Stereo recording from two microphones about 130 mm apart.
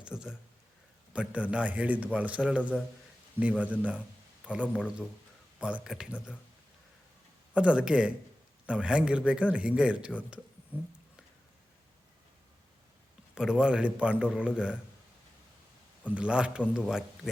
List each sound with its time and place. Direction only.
0.0 s a sound: 5° right (ahead or behind)
1.1 s a man's voice: 10° right (ahead or behind)
4.6 s a man's voice: 5° left (ahead or behind)
5.5 s a man's voice: 10° right (ahead or behind)
7.5 s a man's voice: 10° right (ahead or behind)
13.3 s a man's voice: 5° right (ahead or behind)
16.0 s a man's voice: 10° right (ahead or behind)